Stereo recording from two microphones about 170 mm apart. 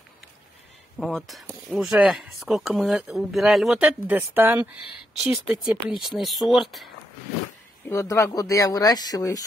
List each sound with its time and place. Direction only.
0.9 s speech: centre (ahead or behind)
5.1 s speech: centre (ahead or behind)
7.9 s speech: 20° left (ahead or behind)